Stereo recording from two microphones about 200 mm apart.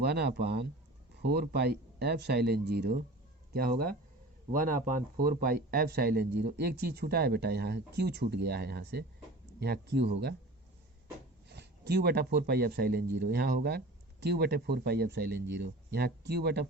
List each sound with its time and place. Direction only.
0.0 s speech: 55° right (ahead or behind)
11.4 s speech: 55° right (ahead or behind)